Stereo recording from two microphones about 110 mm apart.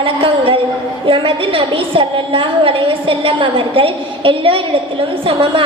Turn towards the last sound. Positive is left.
turn(degrees=-55)  # may be behind; listen again after turning